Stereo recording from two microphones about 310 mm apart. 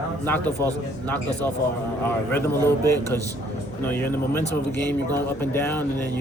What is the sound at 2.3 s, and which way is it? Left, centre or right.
Speech, centre.